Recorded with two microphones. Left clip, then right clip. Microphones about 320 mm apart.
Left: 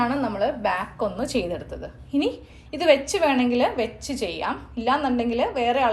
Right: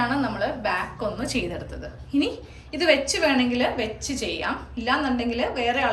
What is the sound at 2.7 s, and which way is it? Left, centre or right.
A woman's voice, centre.